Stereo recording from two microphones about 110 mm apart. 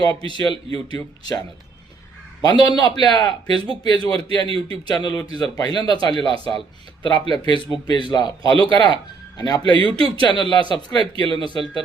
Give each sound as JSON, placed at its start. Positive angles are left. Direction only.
{"t": 0.0, "sound": "a man's voice", "side_deg": 40}
{"t": 2.4, "sound": "a man's voice", "side_deg": 35}
{"t": 6.2, "sound": "speech", "side_deg": -55}
{"t": 7.0, "sound": "a man's voice", "side_deg": 45}